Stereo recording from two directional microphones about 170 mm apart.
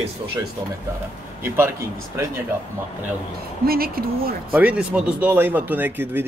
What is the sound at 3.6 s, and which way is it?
Speech, 60° right (ahead or behind).